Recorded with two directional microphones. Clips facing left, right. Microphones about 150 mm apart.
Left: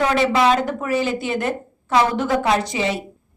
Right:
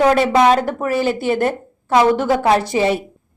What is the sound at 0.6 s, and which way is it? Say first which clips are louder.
Speech: right 3 dB; 40° right (ahead or behind).